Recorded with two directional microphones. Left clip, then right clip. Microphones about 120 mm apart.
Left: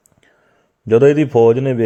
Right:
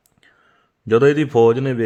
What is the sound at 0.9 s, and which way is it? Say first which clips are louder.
Speech: left 3 dB; 5° right (ahead or behind).